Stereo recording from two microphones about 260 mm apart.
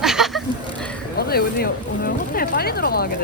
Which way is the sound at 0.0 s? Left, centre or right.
Centre.